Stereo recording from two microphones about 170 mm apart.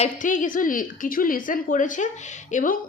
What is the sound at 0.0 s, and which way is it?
A woman's voice, 50° left (ahead or behind).